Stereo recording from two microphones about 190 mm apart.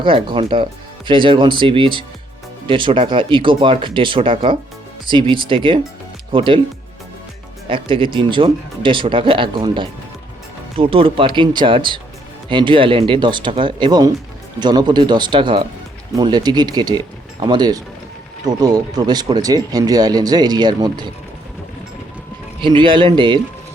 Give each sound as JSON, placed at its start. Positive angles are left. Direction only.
{"t": 0.0, "sound": "speech", "side_deg": -25}
{"t": 7.7, "sound": "speech", "side_deg": -25}
{"t": 22.6, "sound": "speech", "side_deg": -25}